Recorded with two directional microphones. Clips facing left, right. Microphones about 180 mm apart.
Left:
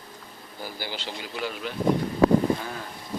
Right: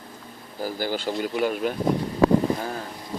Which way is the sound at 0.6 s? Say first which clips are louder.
Right 8 dB; 45° right (ahead or behind).